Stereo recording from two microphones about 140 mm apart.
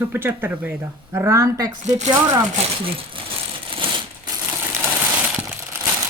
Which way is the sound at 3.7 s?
40° right (ahead or behind).